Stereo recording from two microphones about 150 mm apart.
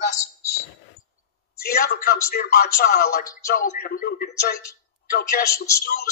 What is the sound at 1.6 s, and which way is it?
A man's voice, 90° left.